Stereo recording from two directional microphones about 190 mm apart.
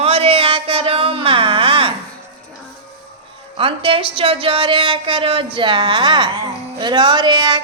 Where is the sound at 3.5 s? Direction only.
30° right (ahead or behind).